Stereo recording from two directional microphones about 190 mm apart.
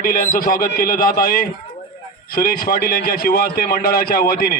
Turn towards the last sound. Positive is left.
turn(degrees=50)  # may be behind; listen again after turning